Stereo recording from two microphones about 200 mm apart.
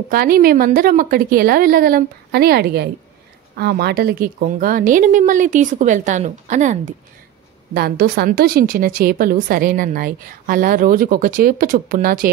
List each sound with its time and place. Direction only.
0.1 s a woman's voice: 50° right (ahead or behind)
7.7 s a woman's voice: 50° right (ahead or behind)